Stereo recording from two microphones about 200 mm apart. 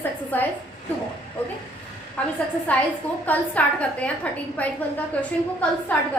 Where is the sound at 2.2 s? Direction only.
10° left (ahead or behind).